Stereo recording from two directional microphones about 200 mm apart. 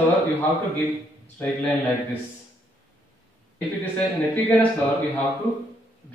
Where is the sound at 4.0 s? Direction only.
10° left (ahead or behind).